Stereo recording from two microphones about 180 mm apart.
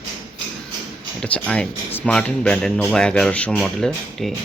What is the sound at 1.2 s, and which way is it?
Speech, 5° left (ahead or behind).